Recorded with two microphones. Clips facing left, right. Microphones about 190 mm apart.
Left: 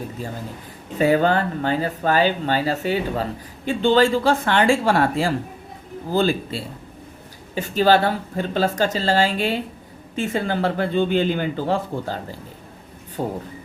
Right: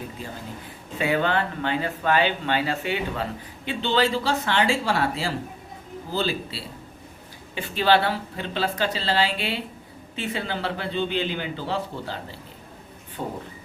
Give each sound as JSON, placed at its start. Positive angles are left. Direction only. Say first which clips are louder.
{"t": 0.9, "sound": "speech", "louder": "left 6 dB", "side_deg": 40}